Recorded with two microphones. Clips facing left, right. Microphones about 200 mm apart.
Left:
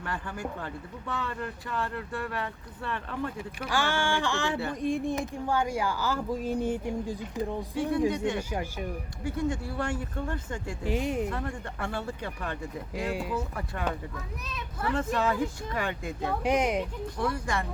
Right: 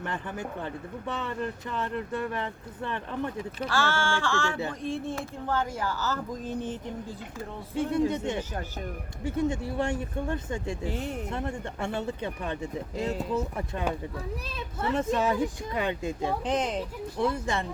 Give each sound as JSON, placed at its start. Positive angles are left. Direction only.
{"t": 0.0, "sound": "speech", "side_deg": -20}
{"t": 3.6, "sound": "speech", "side_deg": 15}
{"t": 9.2, "sound": "speech", "side_deg": -20}
{"t": 10.8, "sound": "speech", "side_deg": 10}
{"t": 11.3, "sound": "speech", "side_deg": -25}
{"t": 13.1, "sound": "speech", "side_deg": 10}
{"t": 13.3, "sound": "speech", "side_deg": -20}
{"t": 16.4, "sound": "speech", "side_deg": 10}
{"t": 17.2, "sound": "speech", "side_deg": -25}